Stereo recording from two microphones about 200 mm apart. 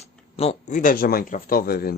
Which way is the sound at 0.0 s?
30° left (ahead or behind).